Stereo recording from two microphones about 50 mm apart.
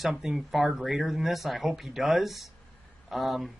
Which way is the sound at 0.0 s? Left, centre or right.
Centre.